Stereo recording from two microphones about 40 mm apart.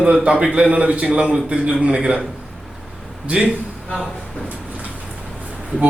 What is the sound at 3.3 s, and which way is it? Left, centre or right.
Speech, right.